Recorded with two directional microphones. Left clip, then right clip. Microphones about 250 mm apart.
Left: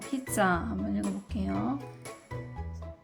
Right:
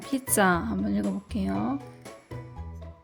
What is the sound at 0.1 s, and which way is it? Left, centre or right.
Speech, right.